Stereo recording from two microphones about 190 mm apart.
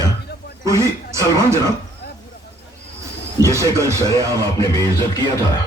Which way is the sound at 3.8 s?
15° right (ahead or behind).